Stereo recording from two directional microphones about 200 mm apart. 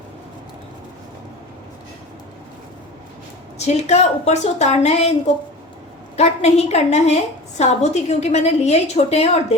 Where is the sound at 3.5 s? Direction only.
35° left (ahead or behind).